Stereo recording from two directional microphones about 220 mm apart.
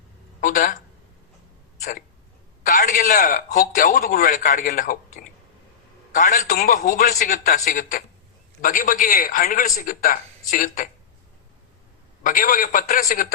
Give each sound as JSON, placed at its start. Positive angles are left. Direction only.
{"t": 0.4, "sound": "speech", "side_deg": 35}
{"t": 1.8, "sound": "hiccup", "side_deg": 40}
{"t": 2.6, "sound": "a man's voice", "side_deg": 35}
{"t": 6.1, "sound": "a man's voice", "side_deg": 35}
{"t": 12.2, "sound": "a man's voice", "side_deg": 40}